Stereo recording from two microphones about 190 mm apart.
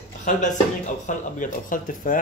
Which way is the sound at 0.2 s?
40° left (ahead or behind).